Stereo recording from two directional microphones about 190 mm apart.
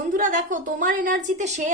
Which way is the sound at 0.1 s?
45° right (ahead or behind).